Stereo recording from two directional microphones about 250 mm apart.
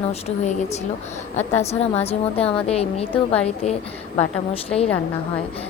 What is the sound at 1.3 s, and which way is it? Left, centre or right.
A woman's voice, left.